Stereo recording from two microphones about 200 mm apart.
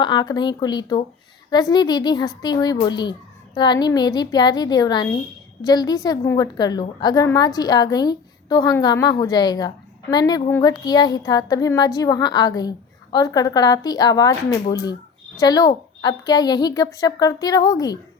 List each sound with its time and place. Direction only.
0.0 s a woman's voice: 20° left (ahead or behind)